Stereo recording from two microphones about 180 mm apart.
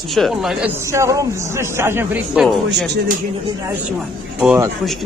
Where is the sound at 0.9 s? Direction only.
15° right (ahead or behind).